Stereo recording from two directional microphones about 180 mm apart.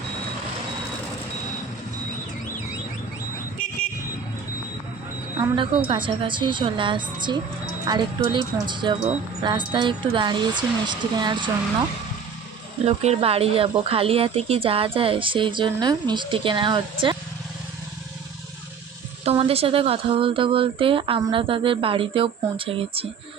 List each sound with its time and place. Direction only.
5.4 s a woman's voice: 25° right (ahead or behind)
12.8 s speech: 35° right (ahead or behind)
19.2 s a woman's voice: 35° right (ahead or behind)